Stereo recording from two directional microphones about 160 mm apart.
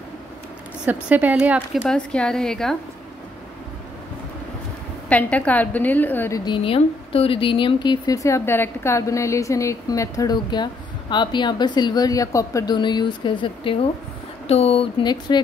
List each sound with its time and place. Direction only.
0.8 s a woman's voice: 10° right (ahead or behind)
1.9 s a woman's voice: 5° left (ahead or behind)
5.1 s a woman's voice: 10° left (ahead or behind)
6.4 s a woman's voice: 35° left (ahead or behind)